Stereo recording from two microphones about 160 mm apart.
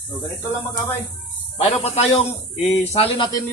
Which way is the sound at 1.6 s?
40° left (ahead or behind).